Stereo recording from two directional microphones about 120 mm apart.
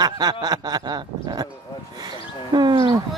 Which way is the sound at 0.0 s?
35° right (ahead or behind).